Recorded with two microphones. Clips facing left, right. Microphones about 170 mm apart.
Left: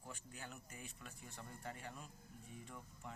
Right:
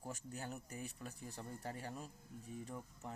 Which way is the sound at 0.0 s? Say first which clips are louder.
Right 6 dB; 40° right (ahead or behind).